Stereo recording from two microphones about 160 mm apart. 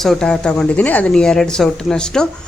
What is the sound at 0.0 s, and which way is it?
Speech, 5° left (ahead or behind).